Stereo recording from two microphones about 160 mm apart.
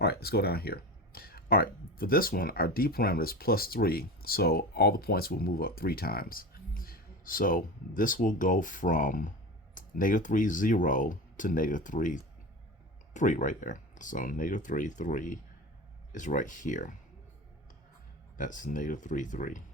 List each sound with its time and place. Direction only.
0.0 s speech: 80° left; by 16.9 s 50° left (ahead or behind)
18.3 s speech: 55° left (ahead or behind)